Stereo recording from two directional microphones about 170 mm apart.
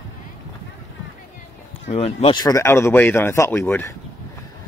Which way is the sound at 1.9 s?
40° left (ahead or behind).